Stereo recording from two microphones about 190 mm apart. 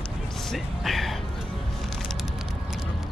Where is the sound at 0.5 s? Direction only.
Centre (ahead or behind).